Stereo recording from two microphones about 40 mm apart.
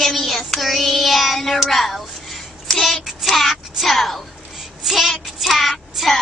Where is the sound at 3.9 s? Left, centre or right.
Centre.